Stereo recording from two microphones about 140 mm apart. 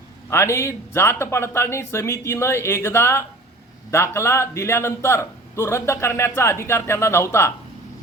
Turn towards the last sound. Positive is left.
turn(degrees=20)  # may be behind; listen again after turning